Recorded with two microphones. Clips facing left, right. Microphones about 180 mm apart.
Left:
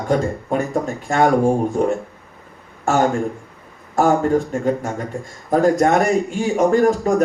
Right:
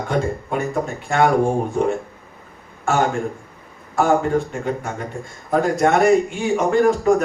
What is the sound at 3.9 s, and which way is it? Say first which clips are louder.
A man's voice: left 2 dB; 45° left (ahead or behind).